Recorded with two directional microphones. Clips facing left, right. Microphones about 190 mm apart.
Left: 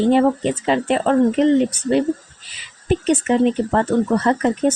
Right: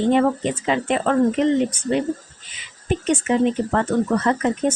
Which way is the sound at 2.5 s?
35° left (ahead or behind).